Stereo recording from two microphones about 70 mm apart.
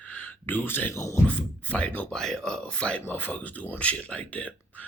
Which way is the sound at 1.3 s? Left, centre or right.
Centre.